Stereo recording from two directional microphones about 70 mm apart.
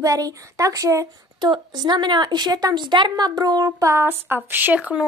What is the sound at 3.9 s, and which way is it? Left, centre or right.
Speech, right.